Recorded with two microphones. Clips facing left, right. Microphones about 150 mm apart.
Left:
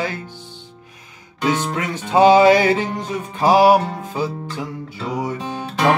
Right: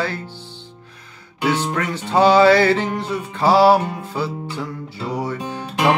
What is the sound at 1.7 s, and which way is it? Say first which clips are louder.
Music: left 1 dB; 15° left (ahead or behind).